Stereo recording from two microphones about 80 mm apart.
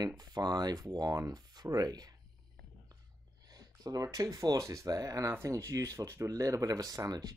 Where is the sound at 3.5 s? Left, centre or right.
Right.